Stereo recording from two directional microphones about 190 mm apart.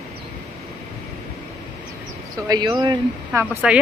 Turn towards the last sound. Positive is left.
turn(degrees=-5)  # may be behind; listen again after turning